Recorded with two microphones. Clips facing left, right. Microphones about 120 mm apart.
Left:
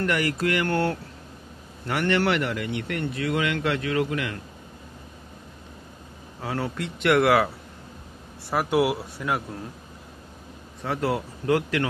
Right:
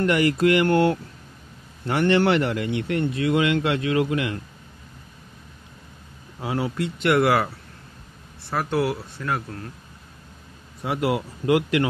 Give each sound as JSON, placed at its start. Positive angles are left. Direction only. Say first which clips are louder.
{"t": 0.0, "sound": "speech", "louder": "right 5 dB", "side_deg": -20}
{"t": 6.4, "sound": "speech", "louder": "right 3 dB", "side_deg": -15}
{"t": 6.8, "sound": "speech", "louder": "even", "side_deg": 0}
{"t": 8.5, "sound": "speech", "louder": "left 1 dB", "side_deg": 10}
{"t": 10.8, "sound": "speech", "louder": "right 2 dB", "side_deg": -10}